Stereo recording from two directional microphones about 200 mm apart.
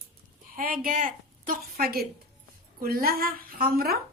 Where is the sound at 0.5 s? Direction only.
45° right (ahead or behind).